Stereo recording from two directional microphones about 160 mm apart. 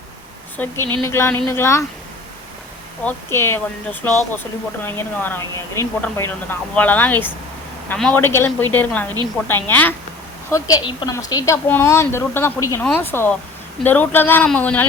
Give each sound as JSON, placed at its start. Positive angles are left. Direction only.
{"t": 0.5, "sound": "speech", "side_deg": 10}
{"t": 3.0, "sound": "speech", "side_deg": 10}
{"t": 10.5, "sound": "a woman's voice", "side_deg": 25}